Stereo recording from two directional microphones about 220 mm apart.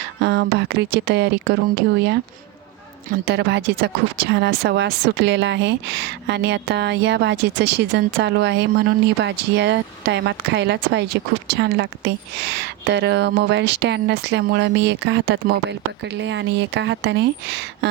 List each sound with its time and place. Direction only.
0.2 s speech: 50° right (ahead or behind)